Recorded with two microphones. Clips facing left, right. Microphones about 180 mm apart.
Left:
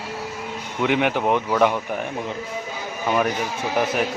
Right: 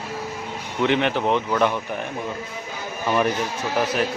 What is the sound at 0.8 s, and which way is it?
Speech, 10° left (ahead or behind).